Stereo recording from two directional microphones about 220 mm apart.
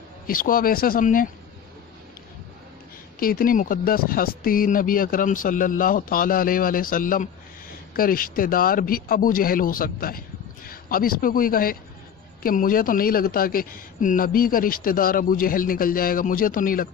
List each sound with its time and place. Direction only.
0.3 s speech: 40° left (ahead or behind)
3.2 s a man's voice: 40° left (ahead or behind)